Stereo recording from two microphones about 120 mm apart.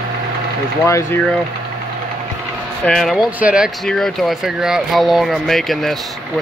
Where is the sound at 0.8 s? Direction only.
25° left (ahead or behind).